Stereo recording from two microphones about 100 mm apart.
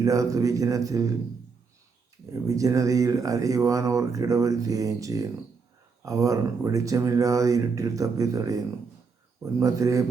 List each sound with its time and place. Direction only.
0.0 s speech: 35° right (ahead or behind)
2.3 s speech: 35° right (ahead or behind)